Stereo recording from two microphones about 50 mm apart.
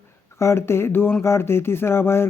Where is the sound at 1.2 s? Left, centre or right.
Left.